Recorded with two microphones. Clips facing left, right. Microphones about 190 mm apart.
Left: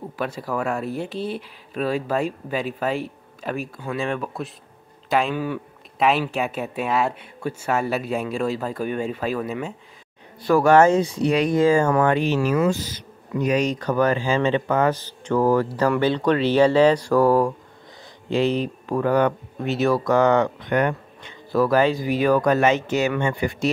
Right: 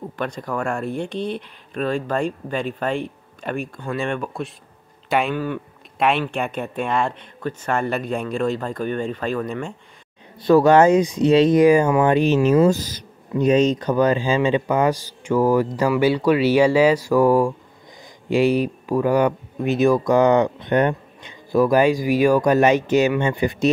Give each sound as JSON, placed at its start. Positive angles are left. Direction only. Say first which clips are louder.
{"t": 0.1, "sound": "speech", "louder": "even", "side_deg": 5}
{"t": 10.4, "sound": "speech", "louder": "right 2 dB", "side_deg": -20}
{"t": 12.6, "sound": "speech", "louder": "right 4 dB", "side_deg": -40}
{"t": 13.3, "sound": "speech", "louder": "right 5 dB", "side_deg": -25}